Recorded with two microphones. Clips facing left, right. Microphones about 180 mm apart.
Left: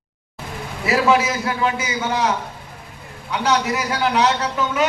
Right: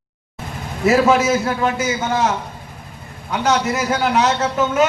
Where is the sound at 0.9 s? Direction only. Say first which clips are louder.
Right 4 dB; 45° right (ahead or behind).